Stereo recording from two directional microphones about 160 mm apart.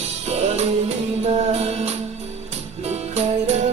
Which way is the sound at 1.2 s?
40° right (ahead or behind).